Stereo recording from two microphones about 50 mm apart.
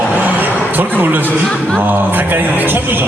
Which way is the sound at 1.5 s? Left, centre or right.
Left.